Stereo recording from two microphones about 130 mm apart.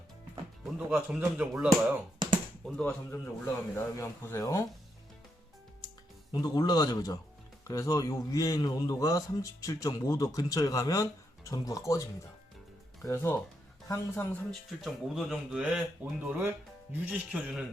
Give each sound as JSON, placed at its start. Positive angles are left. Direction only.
{"t": 0.6, "sound": "speech", "side_deg": -5}
{"t": 2.6, "sound": "speech", "side_deg": 5}
{"t": 3.1, "sound": "a man's voice", "side_deg": 20}
{"t": 6.3, "sound": "a man's voice", "side_deg": 30}
{"t": 13.1, "sound": "a man's voice", "side_deg": 20}
{"t": 14.7, "sound": "speech", "side_deg": 0}